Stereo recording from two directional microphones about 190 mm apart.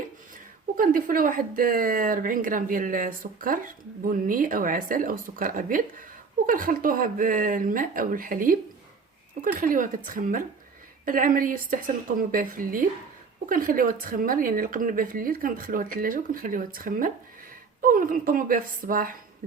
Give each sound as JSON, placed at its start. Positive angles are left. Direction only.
{"t": 0.8, "sound": "speech", "side_deg": -45}